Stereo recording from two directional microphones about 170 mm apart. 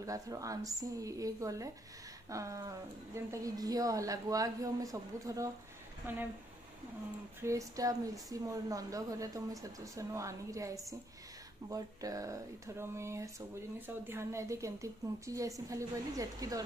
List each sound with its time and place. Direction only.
0.0 s speech: 20° right (ahead or behind)
7.4 s speech: 20° right (ahead or behind)